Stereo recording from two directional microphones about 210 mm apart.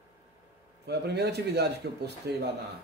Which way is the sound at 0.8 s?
50° right (ahead or behind).